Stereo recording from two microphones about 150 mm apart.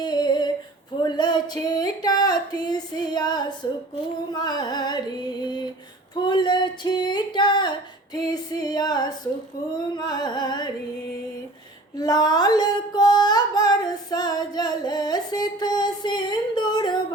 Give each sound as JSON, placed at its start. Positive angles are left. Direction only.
{"t": 0.0, "sound": "a sound", "side_deg": 30}
{"t": 9.7, "sound": "music", "side_deg": 30}
{"t": 11.9, "sound": "music", "side_deg": 25}